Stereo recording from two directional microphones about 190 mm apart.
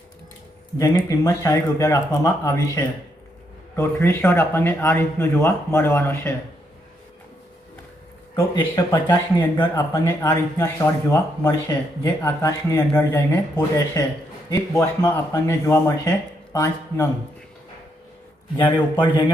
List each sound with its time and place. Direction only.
0.8 s speech: 15° left (ahead or behind)
8.5 s speech: 20° left (ahead or behind)
18.5 s a man's voice: 25° left (ahead or behind)